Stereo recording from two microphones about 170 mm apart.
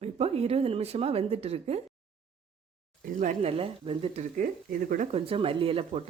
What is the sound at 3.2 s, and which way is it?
Speech, 40° right (ahead or behind).